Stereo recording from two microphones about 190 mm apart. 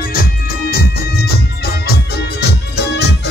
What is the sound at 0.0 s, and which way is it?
Music, 50° left (ahead or behind).